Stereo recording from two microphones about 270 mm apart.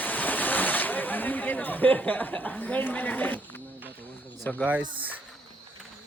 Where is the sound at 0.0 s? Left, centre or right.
Centre.